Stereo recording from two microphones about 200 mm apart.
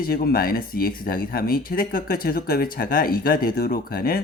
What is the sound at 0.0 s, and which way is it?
Speech, 50° left (ahead or behind).